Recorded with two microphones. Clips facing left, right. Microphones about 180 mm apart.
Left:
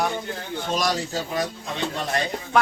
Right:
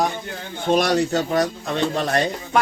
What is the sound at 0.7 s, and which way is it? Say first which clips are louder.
Speech: right 8 dB; 60° right (ahead or behind).